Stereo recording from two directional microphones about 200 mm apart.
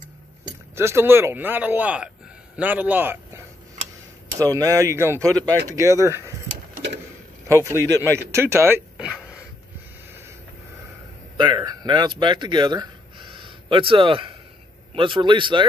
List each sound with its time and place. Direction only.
0.7 s speech: 10° right (ahead or behind)
7.4 s speech: 15° right (ahead or behind)
8.3 s a sound: 15° right (ahead or behind)
11.3 s a man's voice: 20° right (ahead or behind)